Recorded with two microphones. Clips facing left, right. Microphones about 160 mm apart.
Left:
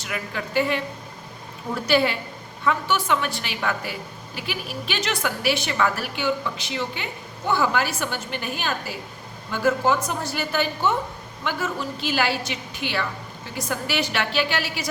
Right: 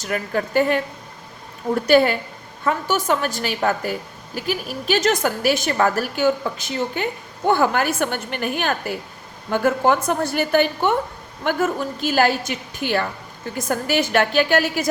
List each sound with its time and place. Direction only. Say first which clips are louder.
0.0 s a woman's voice: right 7 dB; 45° right (ahead or behind)
1.9 s a woman's voice: right 5 dB; 45° right (ahead or behind)